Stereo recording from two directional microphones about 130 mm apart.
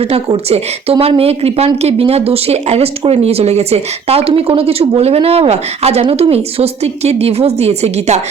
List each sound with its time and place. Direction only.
0.0 s speech: 50° right (ahead or behind)